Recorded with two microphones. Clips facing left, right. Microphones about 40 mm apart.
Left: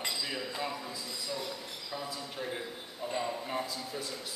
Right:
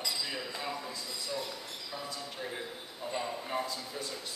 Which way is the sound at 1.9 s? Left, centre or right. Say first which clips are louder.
Left 2 dB; centre.